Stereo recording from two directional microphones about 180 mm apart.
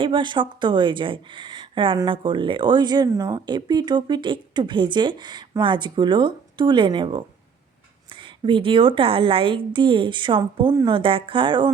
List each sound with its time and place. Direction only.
0.0 s speech: 25° right (ahead or behind)